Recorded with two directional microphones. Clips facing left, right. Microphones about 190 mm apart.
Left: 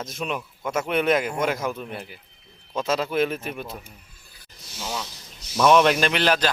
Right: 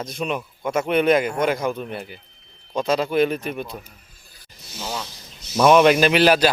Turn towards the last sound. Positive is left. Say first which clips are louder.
# right 6 dB
turn(degrees=-10)  # may be behind; listen again after turning